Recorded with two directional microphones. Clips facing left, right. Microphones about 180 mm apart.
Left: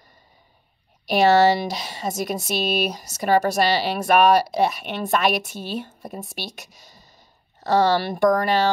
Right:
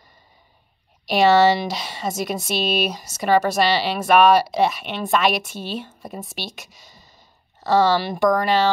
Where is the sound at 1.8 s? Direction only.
40° left (ahead or behind).